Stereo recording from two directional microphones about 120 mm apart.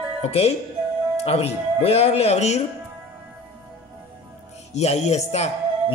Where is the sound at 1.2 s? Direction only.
60° left (ahead or behind).